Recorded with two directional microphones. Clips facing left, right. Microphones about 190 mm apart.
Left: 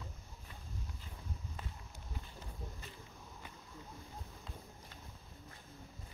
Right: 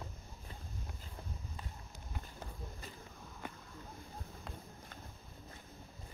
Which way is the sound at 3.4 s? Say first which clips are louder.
Right 11 dB; 55° right (ahead or behind).